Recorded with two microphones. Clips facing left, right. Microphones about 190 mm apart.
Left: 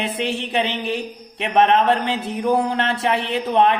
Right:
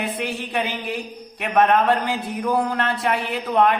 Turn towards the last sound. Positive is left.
turn(degrees=25)  # may be behind; listen again after turning